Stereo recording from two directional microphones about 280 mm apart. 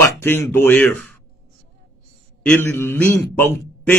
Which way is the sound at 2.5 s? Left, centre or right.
Centre.